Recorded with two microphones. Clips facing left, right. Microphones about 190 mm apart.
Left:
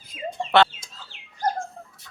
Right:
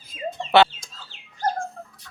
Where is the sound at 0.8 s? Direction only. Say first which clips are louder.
Even; 15° left (ahead or behind).